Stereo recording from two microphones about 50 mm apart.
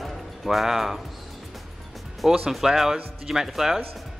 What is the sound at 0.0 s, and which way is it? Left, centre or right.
Music, centre.